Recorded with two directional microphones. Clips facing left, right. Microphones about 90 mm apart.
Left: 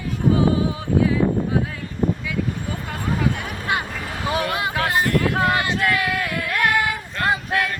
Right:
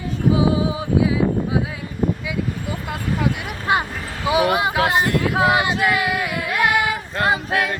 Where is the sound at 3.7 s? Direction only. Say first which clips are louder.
Right 5 dB; 25° right (ahead or behind).